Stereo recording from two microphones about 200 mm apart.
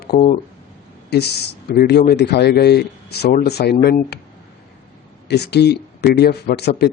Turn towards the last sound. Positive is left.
turn(degrees=55)  # may be behind; listen again after turning